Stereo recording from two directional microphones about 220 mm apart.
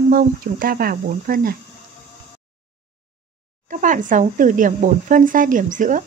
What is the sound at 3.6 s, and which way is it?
Speech, 35° right (ahead or behind).